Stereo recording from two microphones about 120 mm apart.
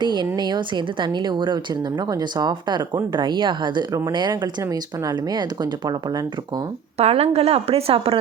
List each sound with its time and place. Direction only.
0.0 s speech: 40° right (ahead or behind)
7.0 s a woman's voice: 60° right (ahead or behind)